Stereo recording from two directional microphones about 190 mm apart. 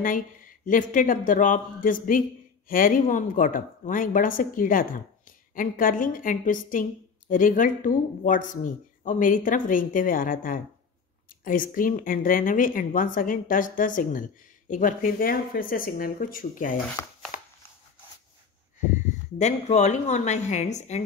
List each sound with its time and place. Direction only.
0.7 s a woman's voice: 45° left (ahead or behind)
19.3 s speech: 35° left (ahead or behind)